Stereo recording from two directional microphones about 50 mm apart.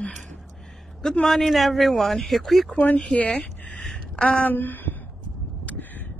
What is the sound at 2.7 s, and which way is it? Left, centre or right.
A woman's voice, left.